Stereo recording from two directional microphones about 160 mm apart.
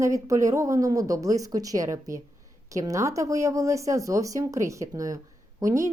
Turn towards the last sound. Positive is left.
turn(degrees=-20)  # may be behind; listen again after turning